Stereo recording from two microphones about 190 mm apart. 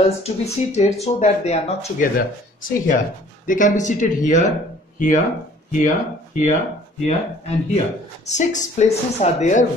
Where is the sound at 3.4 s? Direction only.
40° left (ahead or behind).